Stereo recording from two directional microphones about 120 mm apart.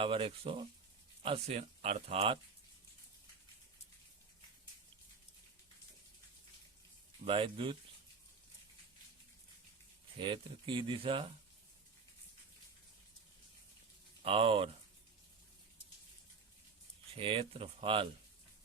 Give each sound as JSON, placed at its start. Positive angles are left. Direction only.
{"t": 0.0, "sound": "speech", "side_deg": -45}
{"t": 7.3, "sound": "speech", "side_deg": -45}
{"t": 10.2, "sound": "speech", "side_deg": -45}
{"t": 14.2, "sound": "speech", "side_deg": -50}
{"t": 17.2, "sound": "speech", "side_deg": -50}